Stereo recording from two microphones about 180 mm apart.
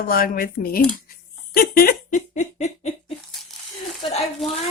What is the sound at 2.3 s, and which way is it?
Laughter, 40° left (ahead or behind).